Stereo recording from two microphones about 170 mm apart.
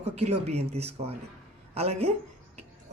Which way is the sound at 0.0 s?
40° right (ahead or behind).